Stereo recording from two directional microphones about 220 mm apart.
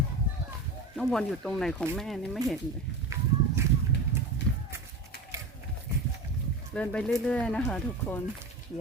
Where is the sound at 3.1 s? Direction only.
15° right (ahead or behind).